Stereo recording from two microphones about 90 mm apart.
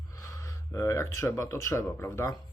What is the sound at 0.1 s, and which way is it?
Speech, 40° left (ahead or behind).